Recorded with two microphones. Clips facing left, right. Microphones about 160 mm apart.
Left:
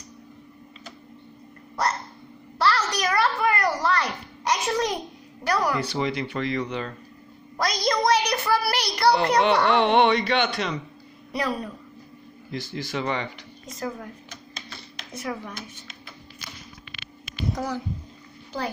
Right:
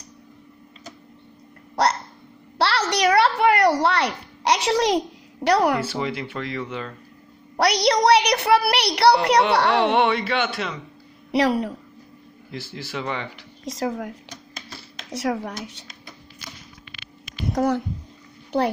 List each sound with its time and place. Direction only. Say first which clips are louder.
2.6 s a sound: right 3 dB; 75° right (ahead or behind)
5.8 s speech: even; 5° right (ahead or behind)
7.5 s a child's voice: right 5 dB; 70° right (ahead or behind)
9.8 s speech: even; centre (ahead or behind)
11.3 s a child's voice: right 8 dB; 75° right (ahead or behind)
12.4 s speech: left 2 dB; 5° right (ahead or behind)
13.7 s a child's voice: right 6 dB; 80° right
17.6 s a child's voice: right 11 dB; 60° right (ahead or behind)